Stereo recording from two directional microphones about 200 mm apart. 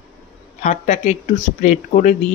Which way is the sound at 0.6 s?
35° left (ahead or behind).